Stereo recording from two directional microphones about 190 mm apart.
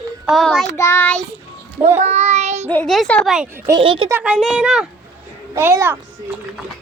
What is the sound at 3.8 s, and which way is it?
Speech, 30° right (ahead or behind).